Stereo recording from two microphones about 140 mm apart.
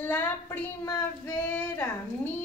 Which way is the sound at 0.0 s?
15° left (ahead or behind).